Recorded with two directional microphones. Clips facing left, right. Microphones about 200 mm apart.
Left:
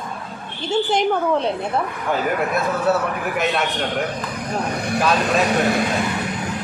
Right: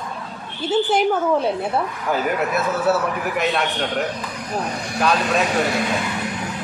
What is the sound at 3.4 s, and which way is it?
Speech, centre (ahead or behind).